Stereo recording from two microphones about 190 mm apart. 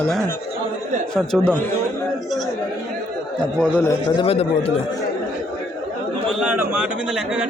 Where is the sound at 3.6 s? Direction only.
5° left (ahead or behind).